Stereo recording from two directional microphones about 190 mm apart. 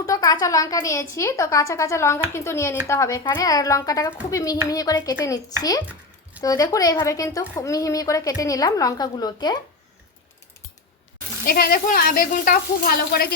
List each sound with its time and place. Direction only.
0.0 s a woman's voice: 20° left (ahead or behind)
5.8 s a sound: 5° right (ahead or behind)
6.4 s a woman's voice: 20° left (ahead or behind)
11.4 s speech: 55° left (ahead or behind)